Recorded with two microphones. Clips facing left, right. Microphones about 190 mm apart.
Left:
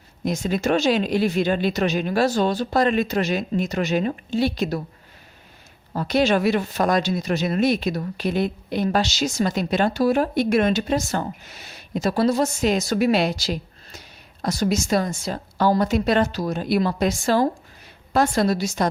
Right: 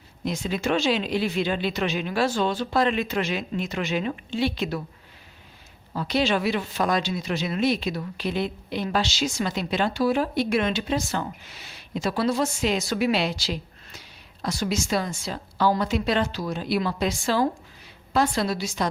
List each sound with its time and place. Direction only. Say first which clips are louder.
0.3 s speech: left 4 dB; 45° left (ahead or behind)
5.9 s speech: left 4 dB; 45° left (ahead or behind)